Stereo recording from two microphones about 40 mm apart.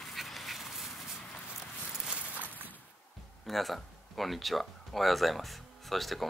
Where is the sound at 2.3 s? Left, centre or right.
Right.